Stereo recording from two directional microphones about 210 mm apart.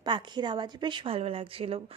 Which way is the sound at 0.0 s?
20° right (ahead or behind).